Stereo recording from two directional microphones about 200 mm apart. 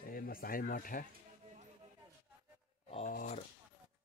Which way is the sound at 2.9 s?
30° left (ahead or behind).